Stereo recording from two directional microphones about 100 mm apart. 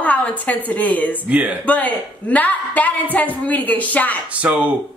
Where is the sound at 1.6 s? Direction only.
15° left (ahead or behind).